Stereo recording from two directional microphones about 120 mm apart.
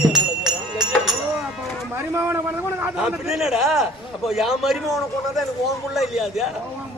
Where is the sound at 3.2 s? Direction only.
5° right (ahead or behind).